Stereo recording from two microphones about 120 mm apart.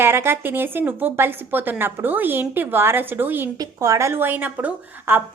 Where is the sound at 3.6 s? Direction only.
30° right (ahead or behind).